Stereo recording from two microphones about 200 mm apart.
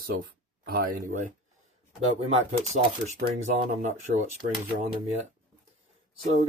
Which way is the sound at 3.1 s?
35° right (ahead or behind).